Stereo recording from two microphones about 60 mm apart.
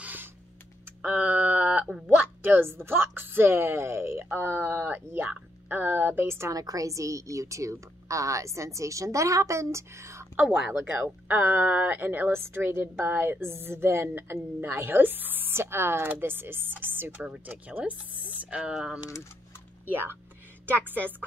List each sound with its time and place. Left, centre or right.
0.0 s a sound: right
1.0 s speech: right
1.4 s a sound: right
2.4 s a woman's voice: right
6.5 s a woman's voice: right
11.2 s a woman's voice: right
12.3 s a woman's voice: right
17.3 s speech: right
18.7 s speech: centre
20.6 s a woman's voice: right